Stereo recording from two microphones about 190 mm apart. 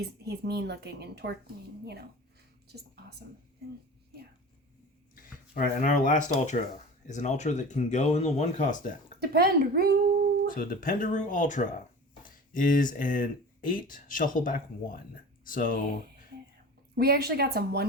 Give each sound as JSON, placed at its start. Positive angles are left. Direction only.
{"t": 0.0, "sound": "a woman's voice", "side_deg": -60}
{"t": 5.2, "sound": "speech", "side_deg": 45}
{"t": 9.2, "sound": "a woman's voice", "side_deg": -55}
{"t": 10.5, "sound": "speech", "side_deg": 45}
{"t": 17.0, "sound": "a woman's voice", "side_deg": -55}